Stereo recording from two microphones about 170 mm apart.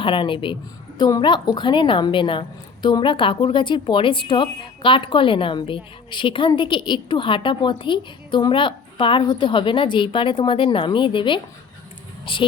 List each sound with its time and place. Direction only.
0.0 s a woman's voice: 30° left (ahead or behind)